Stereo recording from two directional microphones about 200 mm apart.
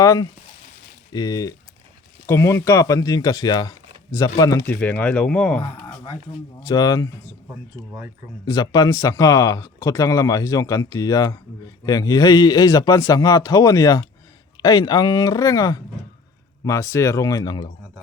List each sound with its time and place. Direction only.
0.0 s speech: 15° left (ahead or behind)
6.6 s speech: 20° left (ahead or behind)
8.4 s speech: 20° left (ahead or behind)